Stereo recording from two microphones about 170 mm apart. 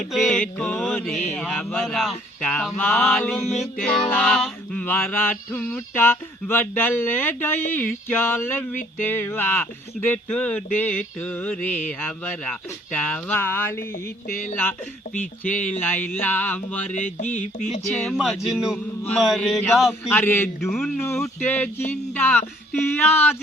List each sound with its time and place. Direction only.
0.1 s music: 5° left (ahead or behind)
4.1 s speech: 10° left (ahead or behind)
15.4 s mantra: 45° left (ahead or behind)
15.8 s speech: 10° left (ahead or behind)
16.9 s mantra: 45° left (ahead or behind)
18.0 s music: centre (ahead or behind)
19.9 s speech: 15° left (ahead or behind)
20.7 s music: centre (ahead or behind)
21.0 s speech: 15° left (ahead or behind)